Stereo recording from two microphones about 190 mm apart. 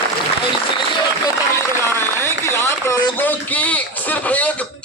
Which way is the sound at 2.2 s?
15° left (ahead or behind).